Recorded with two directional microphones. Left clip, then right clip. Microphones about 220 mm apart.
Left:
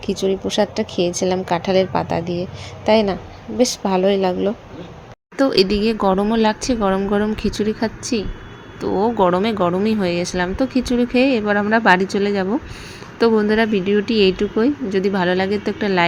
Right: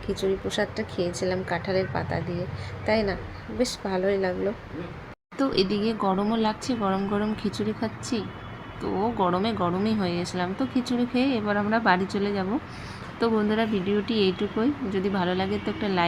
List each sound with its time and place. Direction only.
0.0 s speech: 25° left (ahead or behind)